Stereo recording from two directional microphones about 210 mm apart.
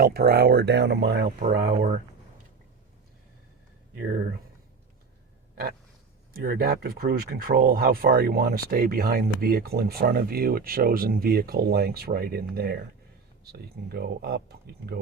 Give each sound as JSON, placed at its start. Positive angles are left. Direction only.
{"t": 0.0, "sound": "speech", "side_deg": -45}
{"t": 6.3, "sound": "speech", "side_deg": -45}